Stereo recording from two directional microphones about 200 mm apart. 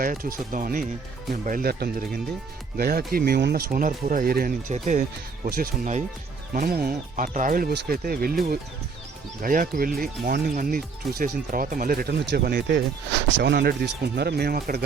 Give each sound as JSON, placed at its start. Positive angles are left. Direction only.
{"t": 0.0, "sound": "speech", "side_deg": -45}
{"t": 9.4, "sound": "speech", "side_deg": -45}